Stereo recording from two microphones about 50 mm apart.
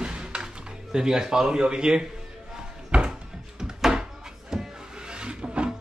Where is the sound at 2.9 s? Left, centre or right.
Centre.